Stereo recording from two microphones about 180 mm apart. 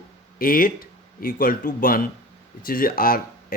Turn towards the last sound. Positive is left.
turn(degrees=55)  # may be behind; listen again after turning